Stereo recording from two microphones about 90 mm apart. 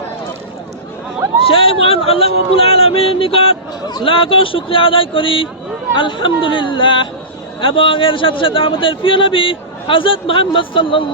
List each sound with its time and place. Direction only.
1.5 s speech: 90° left
4.0 s speech: 80° left